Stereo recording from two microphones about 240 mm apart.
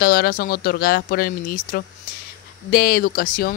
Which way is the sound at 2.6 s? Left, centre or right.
Left.